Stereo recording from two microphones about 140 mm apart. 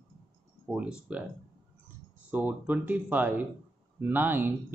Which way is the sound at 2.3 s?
10° right (ahead or behind).